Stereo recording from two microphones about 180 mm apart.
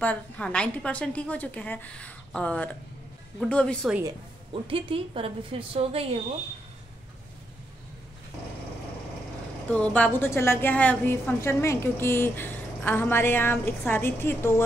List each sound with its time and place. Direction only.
0.0 s a woman's voice: 5° left (ahead or behind)
4.6 s a woman's voice: 30° right (ahead or behind)
9.7 s a woman's voice: 5° left (ahead or behind)